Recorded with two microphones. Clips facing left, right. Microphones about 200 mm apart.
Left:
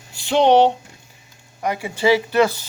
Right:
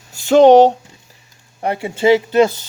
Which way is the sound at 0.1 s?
45° right (ahead or behind).